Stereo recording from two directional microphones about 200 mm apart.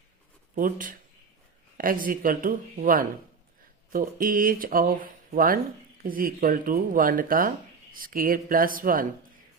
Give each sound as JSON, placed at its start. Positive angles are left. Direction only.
{"t": 0.5, "sound": "speech", "side_deg": -45}